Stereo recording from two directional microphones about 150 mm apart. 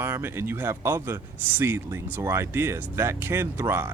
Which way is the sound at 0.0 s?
15° right (ahead or behind).